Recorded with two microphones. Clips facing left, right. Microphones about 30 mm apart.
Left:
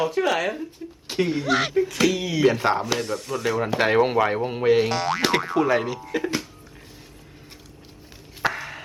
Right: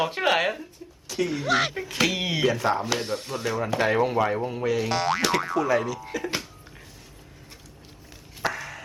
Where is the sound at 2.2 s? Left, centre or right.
Right.